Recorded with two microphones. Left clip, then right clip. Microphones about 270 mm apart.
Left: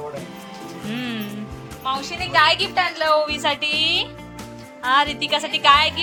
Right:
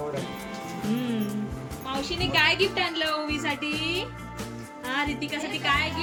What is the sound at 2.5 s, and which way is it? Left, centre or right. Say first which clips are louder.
A woman's voice: left 5 dB; centre.